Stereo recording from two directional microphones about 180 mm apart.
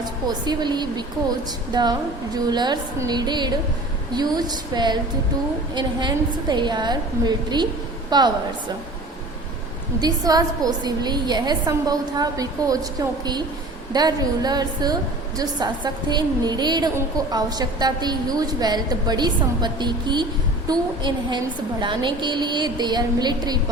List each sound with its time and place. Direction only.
0.0 s a woman's voice: 25° right (ahead or behind)
10.0 s a woman's voice: 20° right (ahead or behind)